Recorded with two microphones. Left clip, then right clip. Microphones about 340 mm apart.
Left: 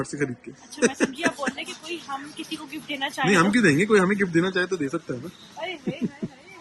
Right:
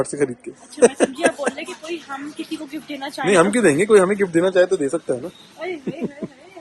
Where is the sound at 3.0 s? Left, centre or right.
Centre.